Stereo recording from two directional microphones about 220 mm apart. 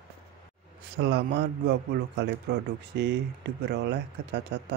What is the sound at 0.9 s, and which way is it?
A man's voice, 50° right (ahead or behind).